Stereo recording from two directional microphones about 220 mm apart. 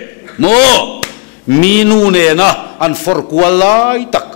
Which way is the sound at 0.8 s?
10° left (ahead or behind).